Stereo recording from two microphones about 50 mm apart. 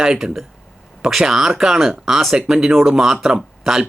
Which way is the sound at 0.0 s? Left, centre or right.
Centre.